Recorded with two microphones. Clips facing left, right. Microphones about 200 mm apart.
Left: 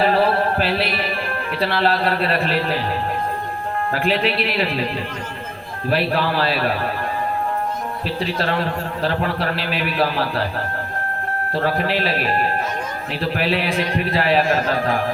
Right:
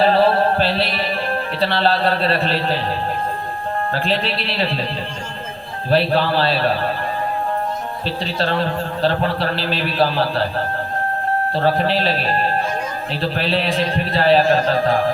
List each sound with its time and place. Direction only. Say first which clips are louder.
0.0 s speech: right 3 dB; 30° right (ahead or behind)
3.9 s a man's voice: left 4 dB; 30° right (ahead or behind)
5.9 s a man's voice: right 3 dB; 30° right (ahead or behind)
8.0 s a man's voice: right 1 dB; 30° right (ahead or behind)
11.5 s a man's voice: right 1 dB; 30° right (ahead or behind)